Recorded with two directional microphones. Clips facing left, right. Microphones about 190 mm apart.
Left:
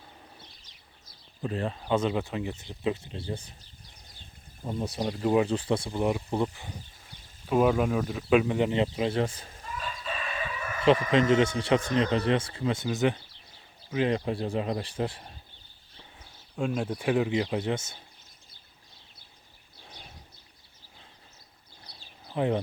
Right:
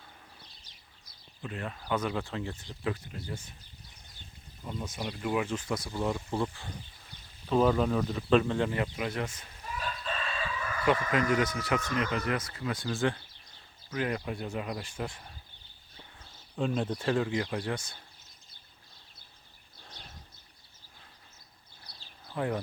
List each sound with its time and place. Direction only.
1.4 s speech: 35° left (ahead or behind)
4.8 s speech: 40° left (ahead or behind)
9.9 s speech: 10° left (ahead or behind); by 15.4 s 30° left (ahead or behind)
16.2 s speech: 10° left (ahead or behind)
19.8 s a sound: 10° left (ahead or behind)
21.8 s a sound: 20° left (ahead or behind)